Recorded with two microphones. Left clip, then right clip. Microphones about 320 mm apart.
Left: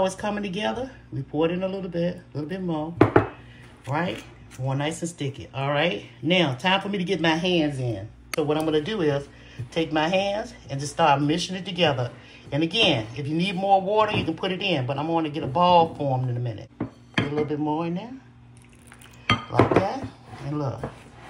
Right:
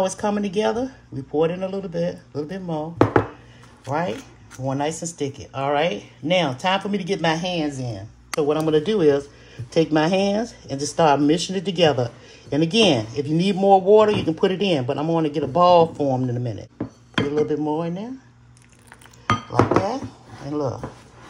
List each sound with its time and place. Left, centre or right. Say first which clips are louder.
0.0 s speech: right 3 dB; right
19.5 s speech: right 1 dB; right